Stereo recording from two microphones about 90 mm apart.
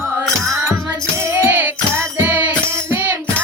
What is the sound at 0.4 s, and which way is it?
Music, 35° right (ahead or behind).